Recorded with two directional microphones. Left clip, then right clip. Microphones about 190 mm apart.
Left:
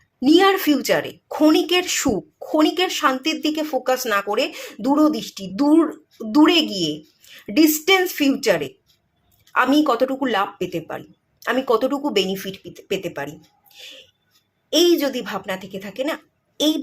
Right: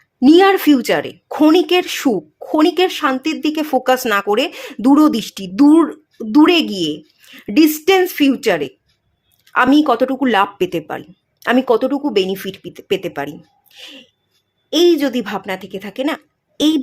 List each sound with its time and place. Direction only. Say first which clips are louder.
0.2 s a woman's voice: right 5 dB; 25° right (ahead or behind)